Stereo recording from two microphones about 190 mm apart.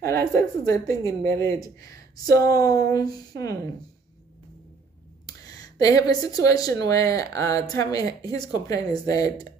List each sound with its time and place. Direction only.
0.0 s a sound: 15° left (ahead or behind)
0.8 s a woman's voice: 15° left (ahead or behind)
5.8 s a woman's voice: 20° left (ahead or behind)